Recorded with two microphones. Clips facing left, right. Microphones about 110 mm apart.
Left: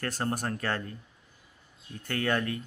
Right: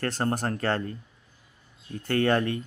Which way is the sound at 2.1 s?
40° right (ahead or behind).